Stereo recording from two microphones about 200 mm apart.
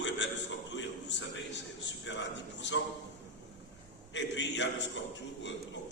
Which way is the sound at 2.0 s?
65° left (ahead or behind).